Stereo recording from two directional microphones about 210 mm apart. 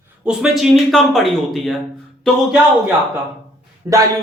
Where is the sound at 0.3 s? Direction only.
Centre (ahead or behind).